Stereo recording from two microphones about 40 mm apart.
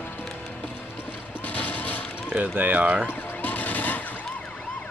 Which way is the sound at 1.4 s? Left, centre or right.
Left.